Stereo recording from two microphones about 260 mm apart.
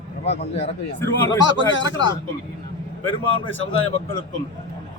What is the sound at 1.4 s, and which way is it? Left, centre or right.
Speech, left.